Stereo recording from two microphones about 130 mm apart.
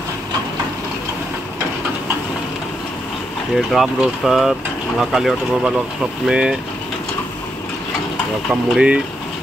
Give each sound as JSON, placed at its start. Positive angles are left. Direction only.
{"t": 3.5, "sound": "speech", "side_deg": 0}
{"t": 8.7, "sound": "speech", "side_deg": -10}